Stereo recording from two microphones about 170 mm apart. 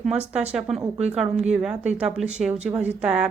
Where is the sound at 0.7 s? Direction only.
Centre (ahead or behind).